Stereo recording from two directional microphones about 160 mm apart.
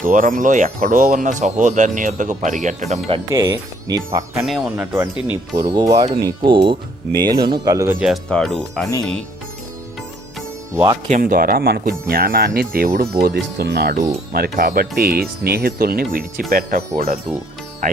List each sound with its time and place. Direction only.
0.0 s speech: 55° right (ahead or behind)
3.2 s speech: 20° right (ahead or behind)
4.4 s speech: centre (ahead or behind)
5.5 s speech: 20° right (ahead or behind)
8.0 s speech: centre (ahead or behind)
11.2 s speech: 65° right (ahead or behind); by 14.0 s 90° right
14.3 s speech: 70° right (ahead or behind)